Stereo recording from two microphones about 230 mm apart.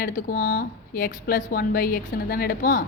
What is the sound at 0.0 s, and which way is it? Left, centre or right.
A woman's voice, left.